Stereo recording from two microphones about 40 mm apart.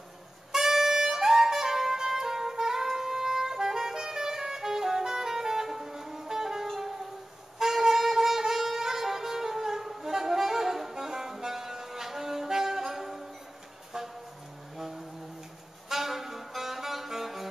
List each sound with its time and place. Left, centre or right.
0.5 s music: centre
15.9 s saxophone: centre